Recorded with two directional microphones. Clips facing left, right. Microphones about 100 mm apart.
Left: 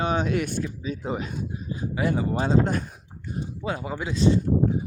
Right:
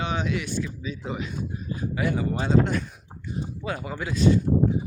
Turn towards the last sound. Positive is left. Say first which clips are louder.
# even
turn(degrees=30)  # may be behind; listen again after turning